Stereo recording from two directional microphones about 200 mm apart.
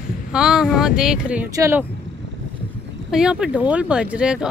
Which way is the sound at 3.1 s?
5° right (ahead or behind).